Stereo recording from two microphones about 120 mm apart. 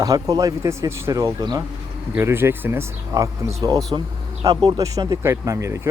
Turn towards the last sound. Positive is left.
turn(degrees=-25)  # may be behind; listen again after turning